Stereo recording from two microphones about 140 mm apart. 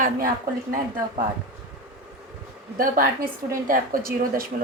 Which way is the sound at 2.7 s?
90° right.